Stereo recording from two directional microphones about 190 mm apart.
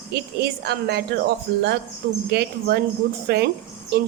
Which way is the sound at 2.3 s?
60° right (ahead or behind).